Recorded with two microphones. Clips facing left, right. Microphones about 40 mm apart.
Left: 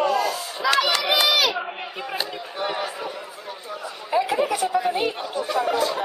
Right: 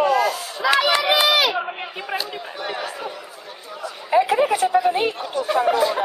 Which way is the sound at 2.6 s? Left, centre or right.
Centre.